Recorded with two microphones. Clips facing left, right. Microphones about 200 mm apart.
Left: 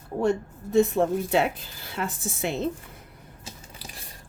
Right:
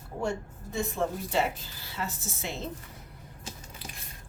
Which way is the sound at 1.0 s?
70° left (ahead or behind).